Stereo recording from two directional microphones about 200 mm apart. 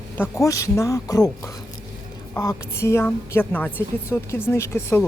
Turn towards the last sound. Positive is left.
turn(degrees=15)  # may be behind; listen again after turning